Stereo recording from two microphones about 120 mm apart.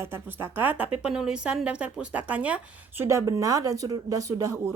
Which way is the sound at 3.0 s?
25° right (ahead or behind).